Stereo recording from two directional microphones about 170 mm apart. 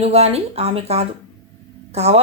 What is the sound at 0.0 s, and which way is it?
Speech, 35° right (ahead or behind).